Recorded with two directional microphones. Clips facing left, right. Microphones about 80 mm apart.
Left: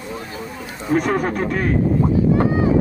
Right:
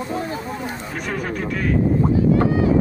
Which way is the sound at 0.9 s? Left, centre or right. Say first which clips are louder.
Left 11 dB; left.